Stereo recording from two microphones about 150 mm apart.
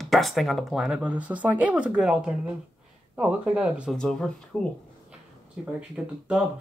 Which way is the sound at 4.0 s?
5° left (ahead or behind).